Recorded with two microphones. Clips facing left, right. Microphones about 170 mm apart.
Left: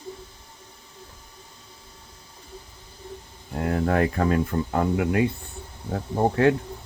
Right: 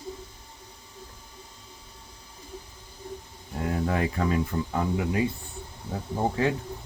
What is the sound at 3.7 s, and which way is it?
Speech, 55° left (ahead or behind).